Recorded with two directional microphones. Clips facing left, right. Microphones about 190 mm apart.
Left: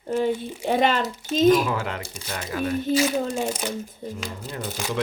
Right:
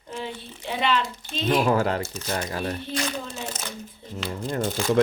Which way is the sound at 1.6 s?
40° right (ahead or behind).